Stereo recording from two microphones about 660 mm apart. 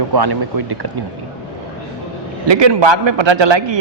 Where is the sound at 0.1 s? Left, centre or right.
Right.